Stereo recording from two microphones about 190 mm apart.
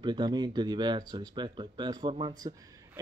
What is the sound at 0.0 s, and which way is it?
Speech, 20° right (ahead or behind).